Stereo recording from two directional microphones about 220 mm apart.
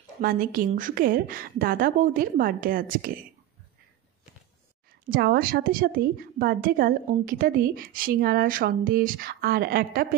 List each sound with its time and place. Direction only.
0.2 s a woman's voice: 40° right (ahead or behind)
5.1 s a woman's voice: 40° right (ahead or behind)